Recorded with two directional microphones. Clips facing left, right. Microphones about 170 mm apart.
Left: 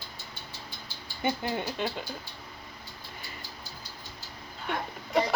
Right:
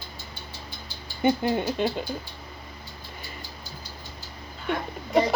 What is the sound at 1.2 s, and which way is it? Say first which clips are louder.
Speech: right 7 dB; 20° right (ahead or behind).